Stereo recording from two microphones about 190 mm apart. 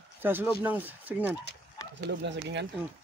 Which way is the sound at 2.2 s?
65° right (ahead or behind).